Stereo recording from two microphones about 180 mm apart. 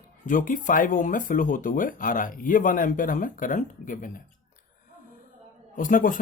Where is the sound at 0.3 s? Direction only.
50° left (ahead or behind).